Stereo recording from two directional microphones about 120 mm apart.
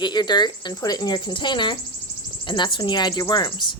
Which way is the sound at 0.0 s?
40° left (ahead or behind).